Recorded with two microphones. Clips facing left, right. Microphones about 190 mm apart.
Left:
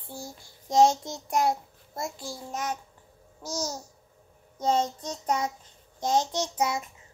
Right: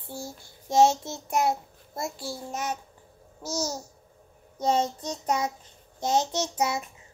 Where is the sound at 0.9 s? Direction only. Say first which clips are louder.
Even; 5° right (ahead or behind).